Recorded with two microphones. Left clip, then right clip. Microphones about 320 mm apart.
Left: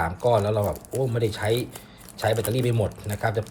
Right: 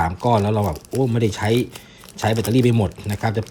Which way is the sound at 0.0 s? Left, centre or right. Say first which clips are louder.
Right 3 dB; right.